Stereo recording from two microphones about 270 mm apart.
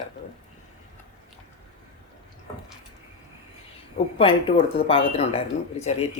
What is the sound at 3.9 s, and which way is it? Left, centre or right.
Speech, centre.